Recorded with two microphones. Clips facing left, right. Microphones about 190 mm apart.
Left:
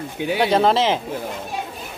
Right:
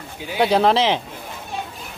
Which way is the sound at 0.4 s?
Centre (ahead or behind).